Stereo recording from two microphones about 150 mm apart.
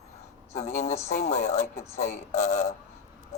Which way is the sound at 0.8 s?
50° left (ahead or behind).